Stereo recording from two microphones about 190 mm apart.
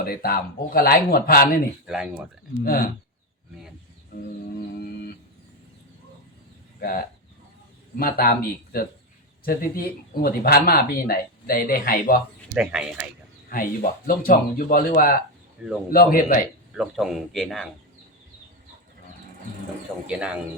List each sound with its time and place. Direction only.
0.0 s speech: 50° left (ahead or behind)
2.6 s speech: 50° left (ahead or behind)
6.7 s speech: 50° left (ahead or behind)
12.5 s a man's voice: 5° right (ahead or behind)
13.5 s speech: 50° left (ahead or behind)
16.7 s a man's voice: centre (ahead or behind)
20.1 s a man's voice: 5° right (ahead or behind)